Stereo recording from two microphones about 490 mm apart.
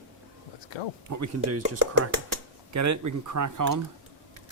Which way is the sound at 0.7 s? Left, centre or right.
Left.